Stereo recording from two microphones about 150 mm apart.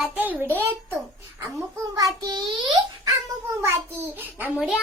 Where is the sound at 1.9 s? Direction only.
25° right (ahead or behind).